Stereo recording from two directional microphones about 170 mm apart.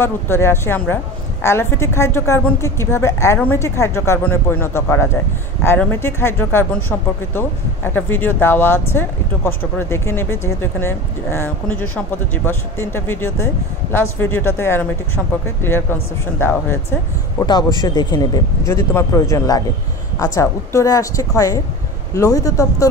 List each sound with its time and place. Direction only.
0.0 s a woman's voice: 15° left (ahead or behind)